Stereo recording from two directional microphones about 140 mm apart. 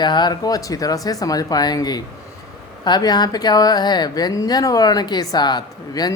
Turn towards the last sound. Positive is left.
turn(degrees=30)  # may be behind; listen again after turning